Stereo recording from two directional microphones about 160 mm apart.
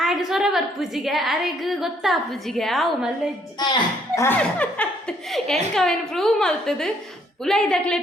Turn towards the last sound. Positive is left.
turn(degrees=5)  # may be behind; listen again after turning